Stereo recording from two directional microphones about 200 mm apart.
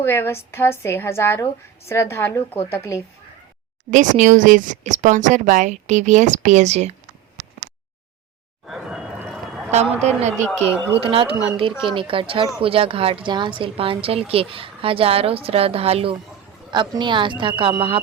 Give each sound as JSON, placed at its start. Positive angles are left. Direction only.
{"t": 0.0, "sound": "a woman's voice", "side_deg": 10}
{"t": 3.9, "sound": "a woman's voice", "side_deg": -40}
{"t": 8.6, "sound": "a sound", "side_deg": 0}
{"t": 10.0, "sound": "a woman's voice", "side_deg": -35}